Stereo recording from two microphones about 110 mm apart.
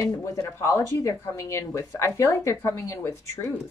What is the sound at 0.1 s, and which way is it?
A woman's voice, 35° left (ahead or behind).